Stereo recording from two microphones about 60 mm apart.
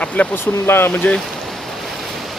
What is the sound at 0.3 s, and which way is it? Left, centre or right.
Speech, left.